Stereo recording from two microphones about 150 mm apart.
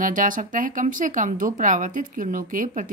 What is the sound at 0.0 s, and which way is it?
Speech, 60° right (ahead or behind).